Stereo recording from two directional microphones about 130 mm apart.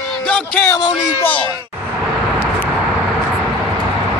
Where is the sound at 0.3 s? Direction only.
15° left (ahead or behind).